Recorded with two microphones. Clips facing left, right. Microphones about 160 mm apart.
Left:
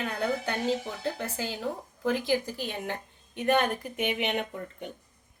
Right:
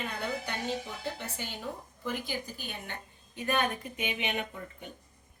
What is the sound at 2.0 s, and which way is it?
A woman's voice, 90° left.